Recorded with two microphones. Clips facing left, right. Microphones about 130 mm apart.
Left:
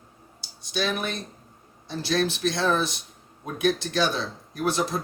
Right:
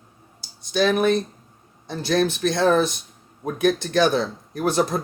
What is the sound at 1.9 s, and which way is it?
Speech, 50° right (ahead or behind).